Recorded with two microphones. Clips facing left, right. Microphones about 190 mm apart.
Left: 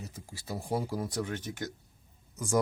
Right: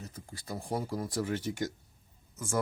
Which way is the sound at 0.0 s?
5° left (ahead or behind).